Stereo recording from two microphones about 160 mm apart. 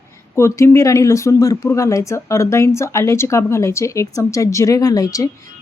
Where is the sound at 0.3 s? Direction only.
15° left (ahead or behind).